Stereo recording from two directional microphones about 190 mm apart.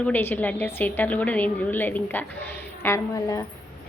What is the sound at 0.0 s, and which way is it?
A woman's voice, 10° left (ahead or behind).